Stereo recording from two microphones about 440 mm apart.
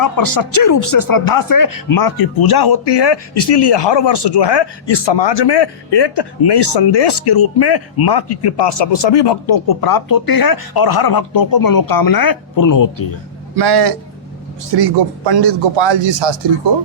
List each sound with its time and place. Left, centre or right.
0.0 s speech: left
13.6 s a man's voice: right